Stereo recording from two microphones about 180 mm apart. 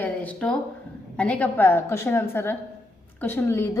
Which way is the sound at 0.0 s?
10° left (ahead or behind).